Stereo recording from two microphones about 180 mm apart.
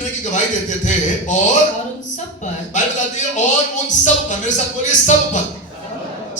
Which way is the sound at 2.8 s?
45° left (ahead or behind).